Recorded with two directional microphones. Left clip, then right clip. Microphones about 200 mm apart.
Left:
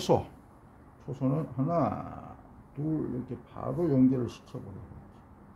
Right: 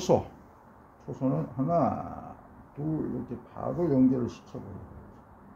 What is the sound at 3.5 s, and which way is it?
Speech, 30° left (ahead or behind).